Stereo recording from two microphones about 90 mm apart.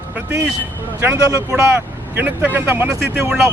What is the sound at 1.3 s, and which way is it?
Speech, 30° right (ahead or behind).